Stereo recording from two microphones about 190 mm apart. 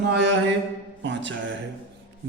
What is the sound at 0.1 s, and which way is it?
Speech, 70° right (ahead or behind).